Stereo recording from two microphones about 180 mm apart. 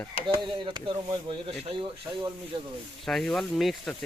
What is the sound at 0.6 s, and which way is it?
Speech, 25° right (ahead or behind).